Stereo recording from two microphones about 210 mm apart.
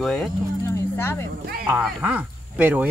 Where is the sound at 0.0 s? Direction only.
Centre (ahead or behind).